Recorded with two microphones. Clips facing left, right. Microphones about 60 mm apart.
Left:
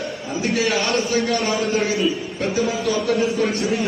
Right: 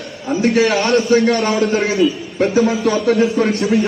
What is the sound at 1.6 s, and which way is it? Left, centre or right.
Speech, right.